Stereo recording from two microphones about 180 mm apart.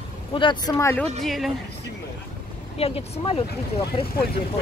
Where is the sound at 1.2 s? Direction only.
Centre (ahead or behind).